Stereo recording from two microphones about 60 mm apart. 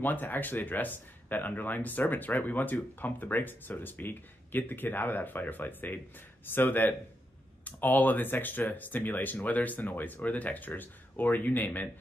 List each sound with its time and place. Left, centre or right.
0.0 s speech: left